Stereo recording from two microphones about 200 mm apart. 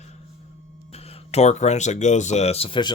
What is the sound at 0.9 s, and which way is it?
Speech, 30° left (ahead or behind).